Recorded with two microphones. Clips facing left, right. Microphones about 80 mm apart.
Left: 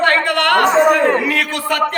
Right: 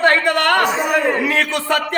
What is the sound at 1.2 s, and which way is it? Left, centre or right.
Speech, right.